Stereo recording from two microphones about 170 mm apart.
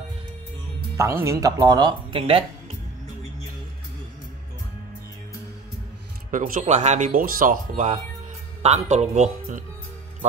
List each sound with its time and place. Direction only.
0.9 s speech: 15° right (ahead or behind); by 2.4 s 30° right (ahead or behind)
6.3 s speech: 50° right (ahead or behind)